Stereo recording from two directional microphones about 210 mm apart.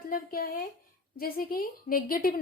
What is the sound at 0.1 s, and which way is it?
A woman's voice, 45° left (ahead or behind).